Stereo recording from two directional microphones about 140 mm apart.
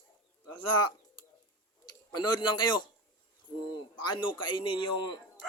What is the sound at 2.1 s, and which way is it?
Speech, 30° left (ahead or behind).